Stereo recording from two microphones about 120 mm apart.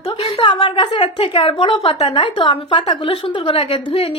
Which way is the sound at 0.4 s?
45° left (ahead or behind).